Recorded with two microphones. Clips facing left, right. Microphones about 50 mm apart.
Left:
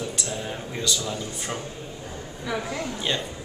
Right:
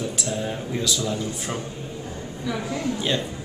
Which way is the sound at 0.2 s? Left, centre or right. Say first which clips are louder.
Right 4 dB; centre.